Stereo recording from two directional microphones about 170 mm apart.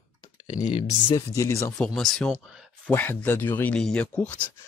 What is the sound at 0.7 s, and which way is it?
Speech, 30° left (ahead or behind).